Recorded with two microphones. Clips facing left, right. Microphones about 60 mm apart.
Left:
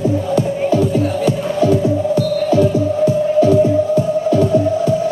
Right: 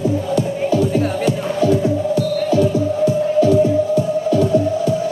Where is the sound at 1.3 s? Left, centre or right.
Left.